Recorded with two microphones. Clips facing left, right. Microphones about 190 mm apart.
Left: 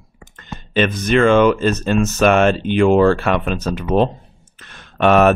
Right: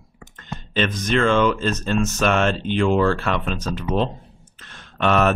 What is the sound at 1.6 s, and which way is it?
Speech, 10° left (ahead or behind).